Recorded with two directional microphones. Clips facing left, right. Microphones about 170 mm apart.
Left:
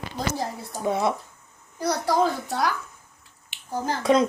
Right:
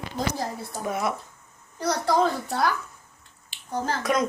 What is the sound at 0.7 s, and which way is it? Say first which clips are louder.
Speech: left 4 dB; 25° left (ahead or behind).